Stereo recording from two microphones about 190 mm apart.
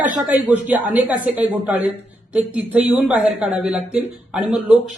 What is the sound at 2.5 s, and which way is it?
Speech, 5° right (ahead or behind).